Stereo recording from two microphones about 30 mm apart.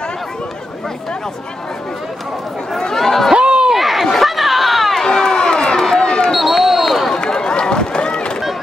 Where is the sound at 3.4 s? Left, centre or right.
Right.